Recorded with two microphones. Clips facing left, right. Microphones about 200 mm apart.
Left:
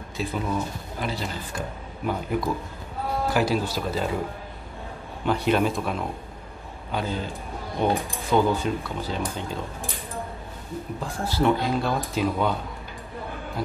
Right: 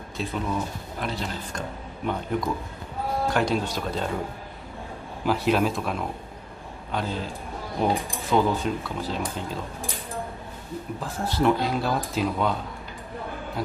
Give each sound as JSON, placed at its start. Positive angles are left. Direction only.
{"t": 0.2, "sound": "speech", "side_deg": 0}
{"t": 5.2, "sound": "speech", "side_deg": 0}
{"t": 11.0, "sound": "speech", "side_deg": 0}